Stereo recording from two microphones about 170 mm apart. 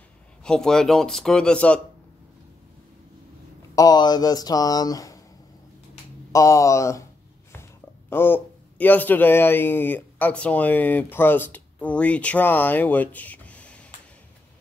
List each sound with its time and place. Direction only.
0.4 s speech: 5° left (ahead or behind)
3.7 s speech: 20° left (ahead or behind)
6.3 s speech: 20° left (ahead or behind)
8.1 s speech: 10° left (ahead or behind)